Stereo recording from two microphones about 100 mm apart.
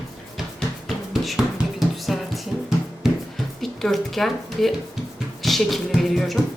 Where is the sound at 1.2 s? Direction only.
Centre (ahead or behind).